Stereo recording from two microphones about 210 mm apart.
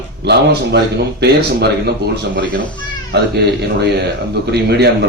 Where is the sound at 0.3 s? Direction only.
50° right (ahead or behind).